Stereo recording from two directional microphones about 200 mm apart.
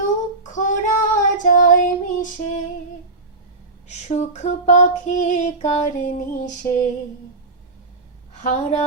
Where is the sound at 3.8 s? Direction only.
35° left (ahead or behind).